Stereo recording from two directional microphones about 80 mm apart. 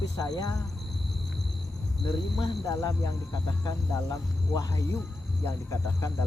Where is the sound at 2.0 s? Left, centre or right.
Left.